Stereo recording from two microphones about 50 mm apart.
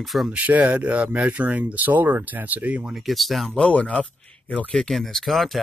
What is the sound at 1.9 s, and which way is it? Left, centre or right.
Speech, right.